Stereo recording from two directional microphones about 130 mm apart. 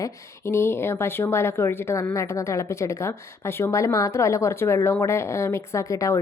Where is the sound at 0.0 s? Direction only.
20° left (ahead or behind).